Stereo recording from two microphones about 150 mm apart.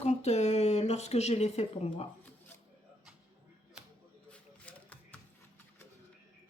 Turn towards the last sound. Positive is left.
turn(degrees=10)  # may be behind; listen again after turning